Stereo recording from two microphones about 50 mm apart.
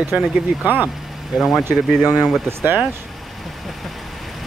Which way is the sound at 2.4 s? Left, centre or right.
Right.